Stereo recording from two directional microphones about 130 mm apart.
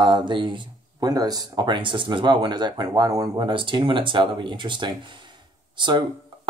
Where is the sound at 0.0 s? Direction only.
35° right (ahead or behind).